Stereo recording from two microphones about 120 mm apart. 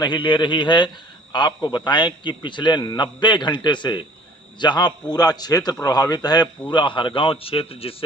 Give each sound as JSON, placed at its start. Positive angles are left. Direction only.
{"t": 0.0, "sound": "a man's voice", "side_deg": 40}